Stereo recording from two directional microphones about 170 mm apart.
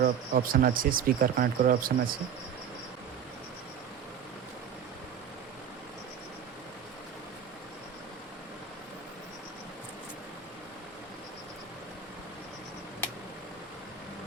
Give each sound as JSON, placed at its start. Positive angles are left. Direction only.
{"t": 0.0, "sound": "speech", "side_deg": -60}